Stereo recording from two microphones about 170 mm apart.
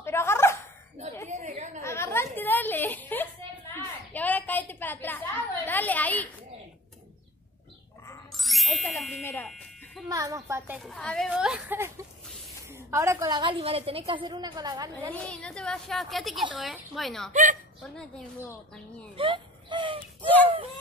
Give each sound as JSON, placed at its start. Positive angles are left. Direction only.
{"t": 0.0, "sound": "a sound", "side_deg": 15}
{"t": 1.3, "sound": "chatter", "side_deg": -40}
{"t": 1.8, "sound": "a sound", "side_deg": 15}
{"t": 8.4, "sound": "ding", "side_deg": 0}
{"t": 9.2, "sound": "a sound", "side_deg": 10}
{"t": 10.0, "sound": "a sound", "side_deg": -20}
{"t": 10.8, "sound": "a woman's voice", "side_deg": 5}
{"t": 12.9, "sound": "a woman's voice", "side_deg": -20}
{"t": 15.1, "sound": "a woman's voice", "side_deg": 5}
{"t": 17.3, "sound": "a woman's voice", "side_deg": -50}
{"t": 17.9, "sound": "a woman's voice", "side_deg": 5}
{"t": 19.1, "sound": "whimper", "side_deg": -30}